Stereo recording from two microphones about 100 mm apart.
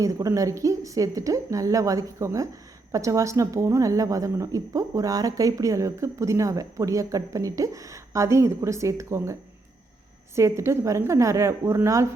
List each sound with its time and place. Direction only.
0.0 s a woman's voice: 30° right (ahead or behind)